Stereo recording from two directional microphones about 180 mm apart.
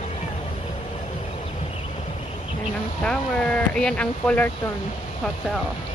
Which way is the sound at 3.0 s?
5° left (ahead or behind).